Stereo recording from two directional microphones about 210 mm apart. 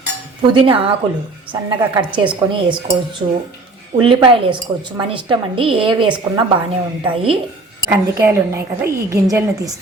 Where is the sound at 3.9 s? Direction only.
25° right (ahead or behind).